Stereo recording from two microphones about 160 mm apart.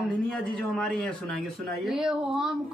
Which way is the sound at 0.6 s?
5° left (ahead or behind).